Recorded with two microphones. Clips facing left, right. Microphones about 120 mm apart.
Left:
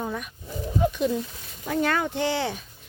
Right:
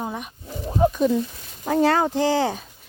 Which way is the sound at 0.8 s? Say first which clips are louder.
Right 6 dB; 35° right (ahead or behind).